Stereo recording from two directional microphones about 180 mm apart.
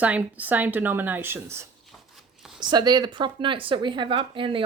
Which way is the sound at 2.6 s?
25° right (ahead or behind).